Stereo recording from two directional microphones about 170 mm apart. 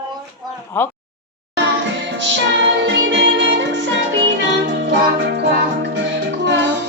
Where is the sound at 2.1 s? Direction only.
90° right.